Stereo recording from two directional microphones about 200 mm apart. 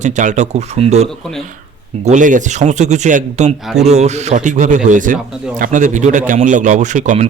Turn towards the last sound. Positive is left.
turn(degrees=-35)  # may be behind; listen again after turning